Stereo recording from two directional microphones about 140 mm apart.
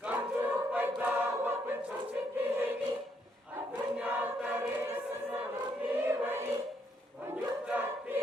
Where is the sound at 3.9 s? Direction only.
10° right (ahead or behind).